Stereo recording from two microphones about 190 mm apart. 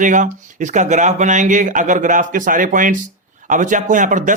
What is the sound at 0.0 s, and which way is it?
Speech, 40° right (ahead or behind).